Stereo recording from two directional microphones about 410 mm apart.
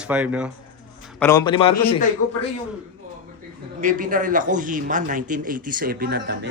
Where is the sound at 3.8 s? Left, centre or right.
Centre.